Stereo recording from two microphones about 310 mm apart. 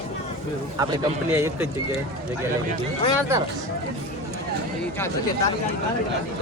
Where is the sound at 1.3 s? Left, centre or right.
Centre.